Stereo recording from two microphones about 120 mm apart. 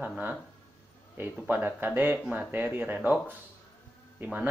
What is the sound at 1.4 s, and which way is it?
Speech, 15° right (ahead or behind).